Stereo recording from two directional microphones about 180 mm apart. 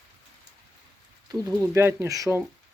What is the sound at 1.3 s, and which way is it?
Speech, 15° right (ahead or behind).